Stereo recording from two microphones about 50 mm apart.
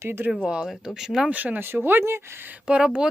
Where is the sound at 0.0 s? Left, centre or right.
Right.